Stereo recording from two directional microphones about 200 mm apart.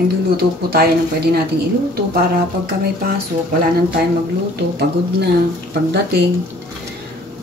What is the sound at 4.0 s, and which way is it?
A woman's voice, 50° right (ahead or behind).